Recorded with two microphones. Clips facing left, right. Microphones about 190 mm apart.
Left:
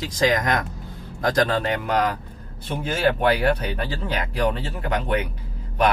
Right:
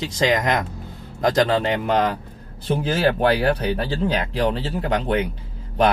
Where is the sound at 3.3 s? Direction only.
30° right (ahead or behind).